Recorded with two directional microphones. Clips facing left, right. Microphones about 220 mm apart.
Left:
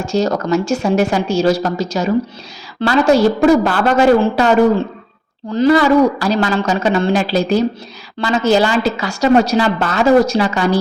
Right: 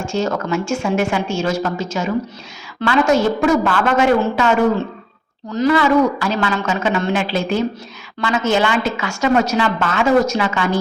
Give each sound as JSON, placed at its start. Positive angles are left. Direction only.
{"t": 0.0, "sound": "a woman's voice", "side_deg": 35}